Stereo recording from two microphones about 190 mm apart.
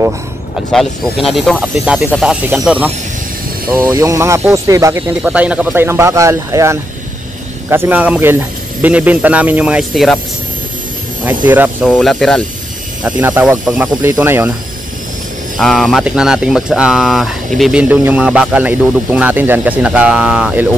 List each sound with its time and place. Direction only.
0.7 s a man's voice: centre (ahead or behind)
11.2 s speech: 10° right (ahead or behind)
11.9 s speech: centre (ahead or behind)
13.0 s a man's voice: 10° right (ahead or behind)
15.5 s a man's voice: centre (ahead or behind)